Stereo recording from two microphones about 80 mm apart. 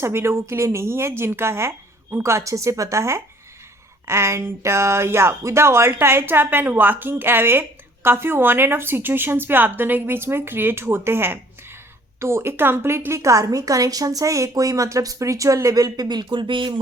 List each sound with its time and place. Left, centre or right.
0.0 s a woman's voice: right